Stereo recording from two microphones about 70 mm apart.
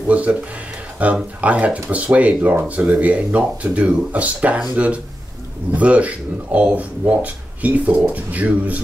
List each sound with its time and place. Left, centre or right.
0.1 s speech: centre